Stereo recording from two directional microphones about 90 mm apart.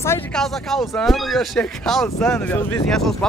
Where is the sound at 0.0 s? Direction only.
25° left (ahead or behind).